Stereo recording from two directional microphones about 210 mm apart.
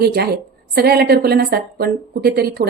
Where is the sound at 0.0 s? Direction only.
50° right (ahead or behind).